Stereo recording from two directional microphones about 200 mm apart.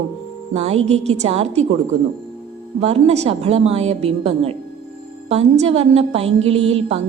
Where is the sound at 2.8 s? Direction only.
35° right (ahead or behind).